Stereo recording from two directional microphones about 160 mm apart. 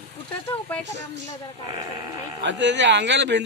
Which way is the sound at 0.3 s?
10° left (ahead or behind).